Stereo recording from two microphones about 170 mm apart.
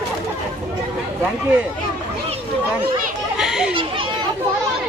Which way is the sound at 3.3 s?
5° right (ahead or behind).